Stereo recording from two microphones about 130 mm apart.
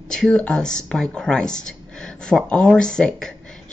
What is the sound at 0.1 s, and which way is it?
Speech, 5° left (ahead or behind).